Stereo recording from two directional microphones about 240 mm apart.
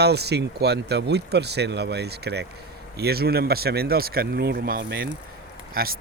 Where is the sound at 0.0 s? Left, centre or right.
Right.